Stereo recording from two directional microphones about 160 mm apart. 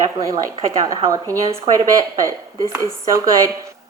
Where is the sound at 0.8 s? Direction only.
20° right (ahead or behind).